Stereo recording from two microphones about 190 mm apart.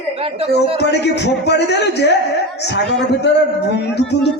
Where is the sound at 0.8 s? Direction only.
60° left (ahead or behind).